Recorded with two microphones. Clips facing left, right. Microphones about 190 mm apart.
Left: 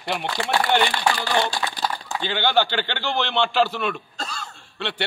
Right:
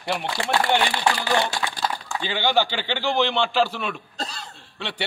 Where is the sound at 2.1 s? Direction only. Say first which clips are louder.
Left 1 dB; 5° right (ahead or behind).